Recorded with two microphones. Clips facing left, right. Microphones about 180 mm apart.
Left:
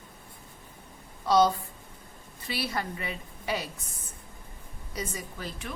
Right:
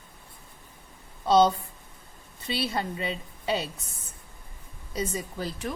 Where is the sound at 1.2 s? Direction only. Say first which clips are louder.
Right 2 dB; 25° right (ahead or behind).